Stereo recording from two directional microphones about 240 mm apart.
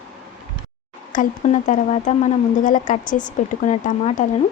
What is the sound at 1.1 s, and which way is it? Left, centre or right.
Speech, left.